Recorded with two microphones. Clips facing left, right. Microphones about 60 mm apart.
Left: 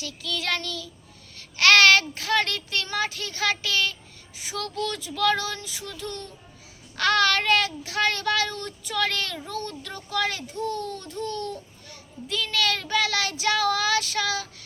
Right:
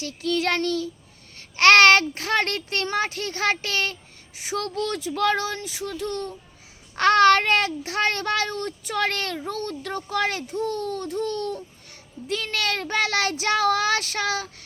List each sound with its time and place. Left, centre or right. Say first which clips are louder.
0.0 s a child's voice: right 7 dB; right
5.5 s a child's voice: right 6 dB; right